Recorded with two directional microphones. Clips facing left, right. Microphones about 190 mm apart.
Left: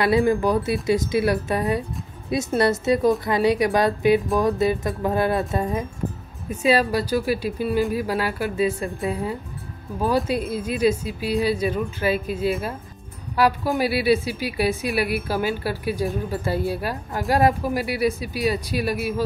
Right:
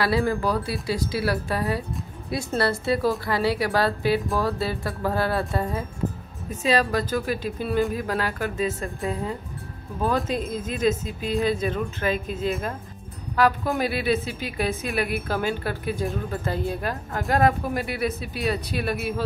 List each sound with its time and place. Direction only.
0.0 s a woman's voice: 20° left (ahead or behind)
10.0 s a woman's voice: 5° left (ahead or behind)